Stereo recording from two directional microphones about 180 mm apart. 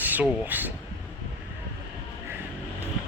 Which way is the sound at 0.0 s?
10° right (ahead or behind).